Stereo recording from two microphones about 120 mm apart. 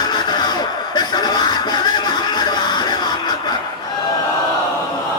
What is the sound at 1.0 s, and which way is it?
Music, 35° left (ahead or behind).